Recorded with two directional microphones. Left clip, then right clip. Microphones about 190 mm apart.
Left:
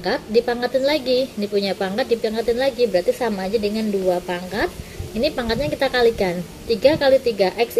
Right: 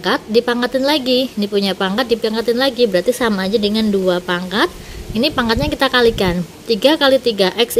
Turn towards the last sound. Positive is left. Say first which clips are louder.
# right 4 dB
turn(degrees=-45)  # may be behind; listen again after turning